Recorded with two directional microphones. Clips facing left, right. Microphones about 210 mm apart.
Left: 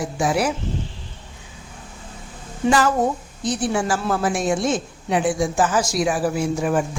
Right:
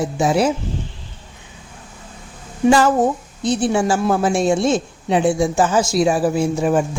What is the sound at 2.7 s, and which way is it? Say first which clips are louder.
A woman's voice: right 4 dB; 25° right (ahead or behind).